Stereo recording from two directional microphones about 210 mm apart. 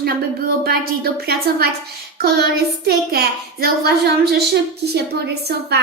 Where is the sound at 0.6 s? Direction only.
45° right (ahead or behind).